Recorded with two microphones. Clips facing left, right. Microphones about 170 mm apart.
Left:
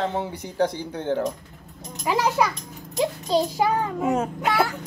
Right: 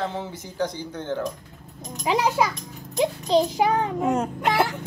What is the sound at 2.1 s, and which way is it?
A child's voice, 15° right (ahead or behind).